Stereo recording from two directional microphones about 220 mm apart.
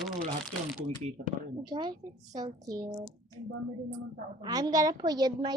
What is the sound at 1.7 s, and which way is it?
A woman's voice, 20° right (ahead or behind).